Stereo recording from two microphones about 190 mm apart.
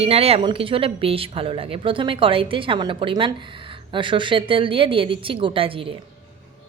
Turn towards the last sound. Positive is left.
turn(degrees=-30)  # may be behind; listen again after turning